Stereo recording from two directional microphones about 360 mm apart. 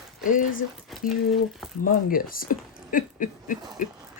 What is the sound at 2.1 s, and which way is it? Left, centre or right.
Speech, left.